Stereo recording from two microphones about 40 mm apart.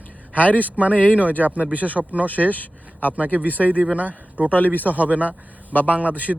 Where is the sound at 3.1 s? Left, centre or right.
Right.